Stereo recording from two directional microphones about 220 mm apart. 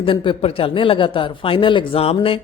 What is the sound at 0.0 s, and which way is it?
A woman's voice, 25° left (ahead or behind).